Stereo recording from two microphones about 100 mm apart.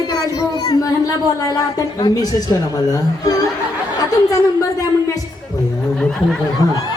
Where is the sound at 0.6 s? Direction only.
40° left (ahead or behind).